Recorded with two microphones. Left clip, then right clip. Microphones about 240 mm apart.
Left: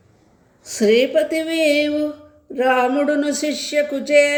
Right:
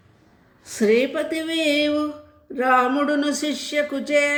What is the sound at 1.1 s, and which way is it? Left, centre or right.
Speech, right.